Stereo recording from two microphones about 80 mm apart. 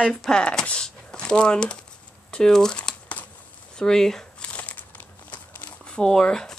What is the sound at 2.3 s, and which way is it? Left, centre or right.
Crumpling, centre.